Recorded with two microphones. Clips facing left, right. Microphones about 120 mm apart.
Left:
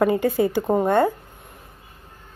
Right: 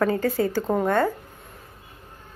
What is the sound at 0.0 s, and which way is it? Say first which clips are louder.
A woman's voice: left 3 dB; 15° left (ahead or behind).